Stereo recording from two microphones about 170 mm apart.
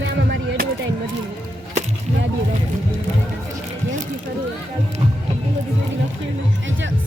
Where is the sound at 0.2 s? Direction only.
75° right (ahead or behind).